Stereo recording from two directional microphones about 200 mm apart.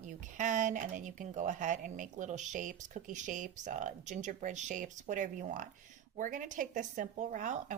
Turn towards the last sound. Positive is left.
turn(degrees=-40)  # may be behind; listen again after turning